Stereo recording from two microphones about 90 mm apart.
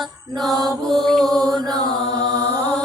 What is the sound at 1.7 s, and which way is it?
Chant, 45° right (ahead or behind).